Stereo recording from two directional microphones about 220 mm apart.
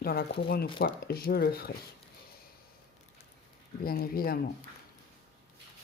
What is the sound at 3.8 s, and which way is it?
Speech, 45° left (ahead or behind).